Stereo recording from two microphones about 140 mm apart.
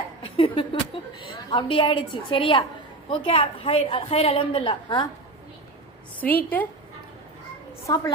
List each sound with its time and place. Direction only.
0.2 s a sound: 40° left (ahead or behind)
1.5 s a woman's voice: 35° left (ahead or behind)
6.1 s a woman's voice: 10° left (ahead or behind)
7.9 s a woman's voice: 25° left (ahead or behind)